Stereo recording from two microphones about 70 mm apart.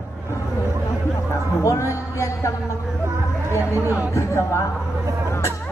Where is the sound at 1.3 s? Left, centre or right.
Left.